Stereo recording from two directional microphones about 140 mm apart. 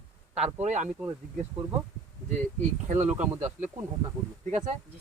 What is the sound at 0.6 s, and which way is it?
Speech, 55° right (ahead or behind).